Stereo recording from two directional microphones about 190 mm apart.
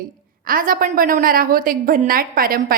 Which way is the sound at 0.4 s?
50° right (ahead or behind).